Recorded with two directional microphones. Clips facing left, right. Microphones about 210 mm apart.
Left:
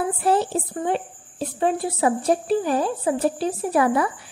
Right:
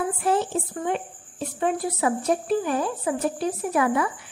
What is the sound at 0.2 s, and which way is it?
A woman's voice, 35° left (ahead or behind).